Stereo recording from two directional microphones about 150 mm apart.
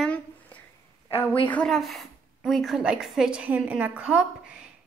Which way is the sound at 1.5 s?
5° left (ahead or behind).